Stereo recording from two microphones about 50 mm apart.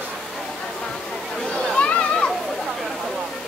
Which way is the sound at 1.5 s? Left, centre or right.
Left.